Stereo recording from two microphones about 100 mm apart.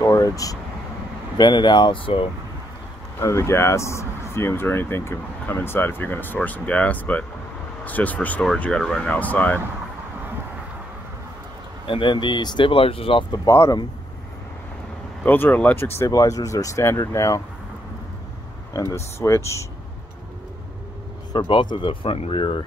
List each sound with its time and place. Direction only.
0.0 s speech: 35° left (ahead or behind)
1.4 s speech: 50° left (ahead or behind)
3.2 s speech: 30° left (ahead or behind)
11.9 s speech: 55° left (ahead or behind)
13.5 s speech: 30° left (ahead or behind)
15.2 s speech: 20° left (ahead or behind)
16.1 s speech: 35° left (ahead or behind)
18.7 s speech: 30° left (ahead or behind)
21.3 s speech: 55° left (ahead or behind)